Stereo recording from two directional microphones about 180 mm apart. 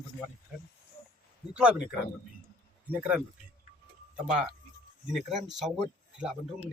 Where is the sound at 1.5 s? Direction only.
5° right (ahead or behind).